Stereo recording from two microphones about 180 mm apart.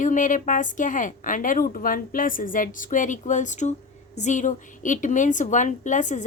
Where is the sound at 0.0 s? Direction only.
45° left (ahead or behind).